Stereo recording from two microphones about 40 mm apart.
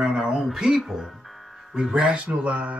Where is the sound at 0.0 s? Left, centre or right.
Right.